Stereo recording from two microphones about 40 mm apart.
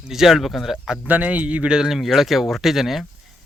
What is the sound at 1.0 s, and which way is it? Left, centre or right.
Speech, right.